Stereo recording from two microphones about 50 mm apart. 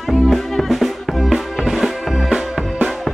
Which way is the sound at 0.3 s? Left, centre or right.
Centre.